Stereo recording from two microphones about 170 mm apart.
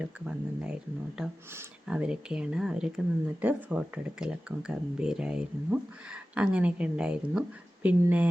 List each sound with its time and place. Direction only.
0.0 s speech: 5° right (ahead or behind)